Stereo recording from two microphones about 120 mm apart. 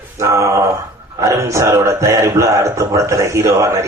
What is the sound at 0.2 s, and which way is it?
Speech, 25° right (ahead or behind).